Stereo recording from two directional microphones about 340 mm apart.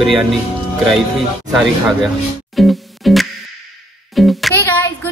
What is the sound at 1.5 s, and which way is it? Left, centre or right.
Music, centre.